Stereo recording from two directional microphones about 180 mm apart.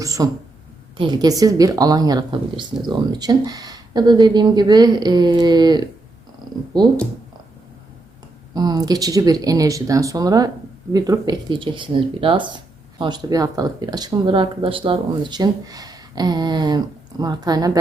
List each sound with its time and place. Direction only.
0.0 s speech: 20° right (ahead or behind)
8.5 s speech: 20° right (ahead or behind)